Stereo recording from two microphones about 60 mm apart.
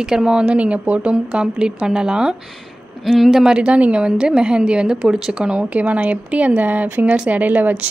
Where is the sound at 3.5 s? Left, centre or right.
Centre.